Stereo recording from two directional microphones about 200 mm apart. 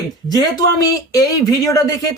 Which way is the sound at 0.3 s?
20° left (ahead or behind).